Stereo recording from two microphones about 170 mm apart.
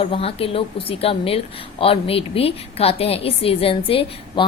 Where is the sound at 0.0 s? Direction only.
35° left (ahead or behind).